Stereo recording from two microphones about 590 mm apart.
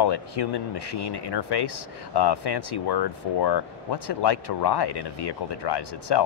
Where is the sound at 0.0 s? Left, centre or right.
Left.